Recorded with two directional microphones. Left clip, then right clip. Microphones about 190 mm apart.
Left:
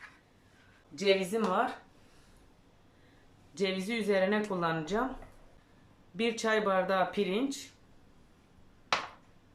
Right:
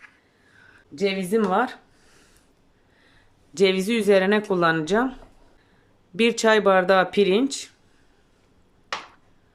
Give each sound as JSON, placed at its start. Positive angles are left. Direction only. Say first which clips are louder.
{"t": 0.9, "sound": "speech", "louder": "right 6 dB", "side_deg": -40}
{"t": 3.5, "sound": "speech", "louder": "right 13 dB", "side_deg": -55}
{"t": 6.1, "sound": "speech", "louder": "right 11 dB", "side_deg": -55}